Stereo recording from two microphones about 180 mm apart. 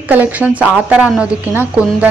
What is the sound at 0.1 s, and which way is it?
Speech, 10° right (ahead or behind).